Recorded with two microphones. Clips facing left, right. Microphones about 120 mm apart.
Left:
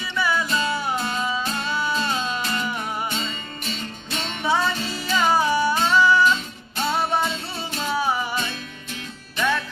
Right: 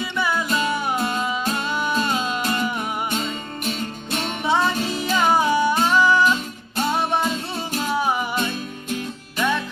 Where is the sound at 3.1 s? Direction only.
50° right (ahead or behind).